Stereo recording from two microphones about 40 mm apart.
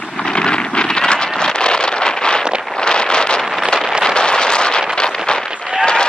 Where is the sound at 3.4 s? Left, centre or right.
Centre.